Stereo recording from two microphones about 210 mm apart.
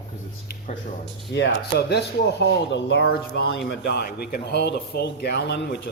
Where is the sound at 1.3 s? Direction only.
55° left (ahead or behind).